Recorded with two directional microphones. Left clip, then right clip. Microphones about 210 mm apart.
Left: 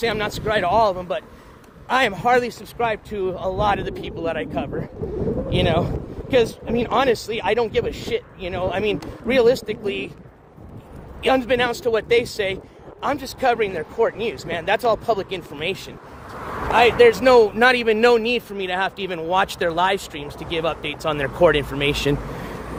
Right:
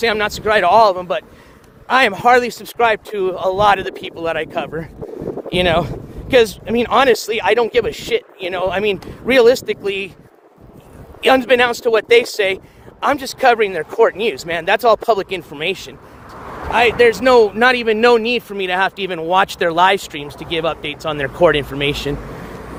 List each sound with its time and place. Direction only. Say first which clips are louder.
0.0 s speech: right 6 dB; 30° right (ahead or behind)
11.2 s speech: right 6 dB; 40° right (ahead or behind); by 22.0 s 10° right (ahead or behind)